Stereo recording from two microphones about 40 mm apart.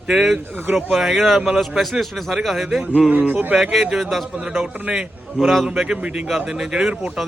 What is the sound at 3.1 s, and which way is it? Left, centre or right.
Speech, right.